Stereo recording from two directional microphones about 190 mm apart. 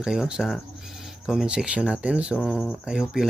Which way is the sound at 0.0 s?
5° right (ahead or behind).